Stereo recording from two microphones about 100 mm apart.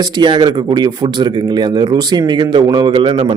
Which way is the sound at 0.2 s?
45° right (ahead or behind).